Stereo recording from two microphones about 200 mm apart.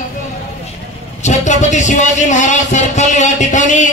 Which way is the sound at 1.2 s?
35° left (ahead or behind).